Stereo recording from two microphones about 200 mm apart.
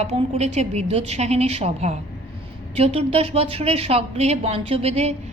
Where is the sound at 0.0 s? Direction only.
35° right (ahead or behind).